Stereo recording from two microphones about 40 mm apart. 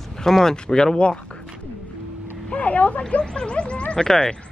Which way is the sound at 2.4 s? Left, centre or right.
Left.